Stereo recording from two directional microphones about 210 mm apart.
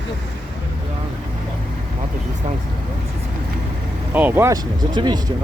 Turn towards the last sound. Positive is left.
turn(degrees=-20)  # may be behind; listen again after turning